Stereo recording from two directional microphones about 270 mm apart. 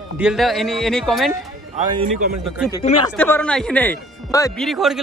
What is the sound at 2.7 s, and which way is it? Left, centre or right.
Speech, left.